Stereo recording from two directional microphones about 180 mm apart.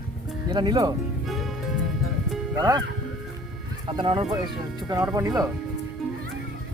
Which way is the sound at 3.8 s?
30° right (ahead or behind).